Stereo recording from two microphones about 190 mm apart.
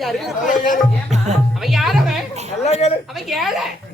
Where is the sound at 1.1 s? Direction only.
35° right (ahead or behind).